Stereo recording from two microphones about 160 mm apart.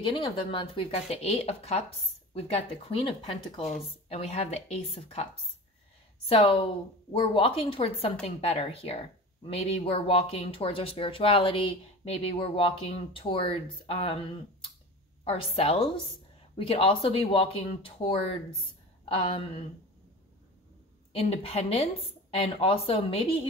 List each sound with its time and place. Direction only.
0.0 s speech: 30° left (ahead or behind)
15.2 s speech: 35° left (ahead or behind)
21.1 s speech: 35° left (ahead or behind)